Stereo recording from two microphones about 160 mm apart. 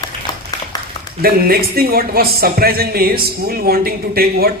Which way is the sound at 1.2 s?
75° right (ahead or behind).